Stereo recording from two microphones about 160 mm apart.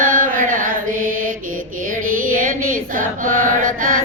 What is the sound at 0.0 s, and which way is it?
Mantra, 55° right (ahead or behind).